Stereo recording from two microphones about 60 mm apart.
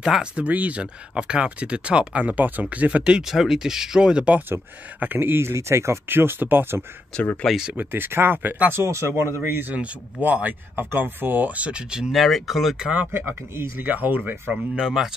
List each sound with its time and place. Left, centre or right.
0.0 s speech: centre
0.5 s speech: right
3.3 s speech: centre
5.0 s speech: right
8.7 s a man's voice: right
9.5 s speech: right; by 12.1 s centre
12.1 s speech: centre
12.8 s speech: centre
13.6 s speech: right
14.5 s speech: centre